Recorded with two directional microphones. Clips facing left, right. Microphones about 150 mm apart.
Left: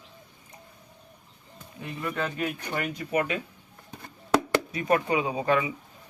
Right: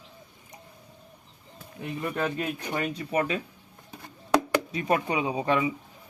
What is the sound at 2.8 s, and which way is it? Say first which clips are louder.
Speech: left 1 dB; 30° right (ahead or behind).